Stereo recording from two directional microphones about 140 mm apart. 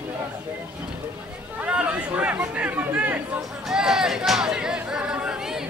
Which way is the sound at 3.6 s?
5° right (ahead or behind).